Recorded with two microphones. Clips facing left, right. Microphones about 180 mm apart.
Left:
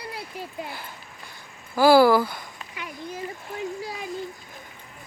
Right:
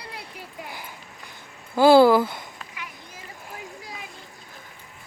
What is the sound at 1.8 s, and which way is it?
Speech, 20° right (ahead or behind).